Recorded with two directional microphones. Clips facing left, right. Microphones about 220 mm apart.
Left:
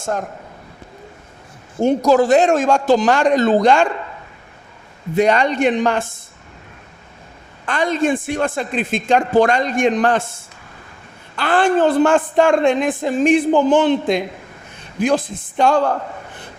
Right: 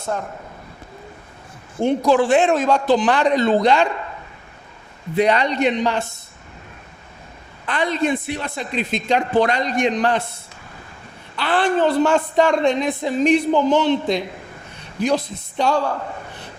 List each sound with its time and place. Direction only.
0.0 s a man's voice: 45° left (ahead or behind)
1.8 s a woman's voice: 40° left (ahead or behind)
5.1 s a woman's voice: 45° left (ahead or behind)
7.6 s a woman's voice: 45° left (ahead or behind)
11.3 s a woman's voice: 45° left (ahead or behind)